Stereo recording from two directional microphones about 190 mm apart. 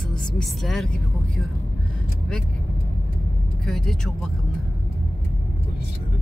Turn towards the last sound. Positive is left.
turn(degrees=0)  # may be behind; listen again after turning